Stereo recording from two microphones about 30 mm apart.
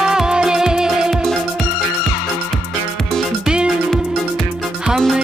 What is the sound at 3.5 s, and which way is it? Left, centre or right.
Music, right.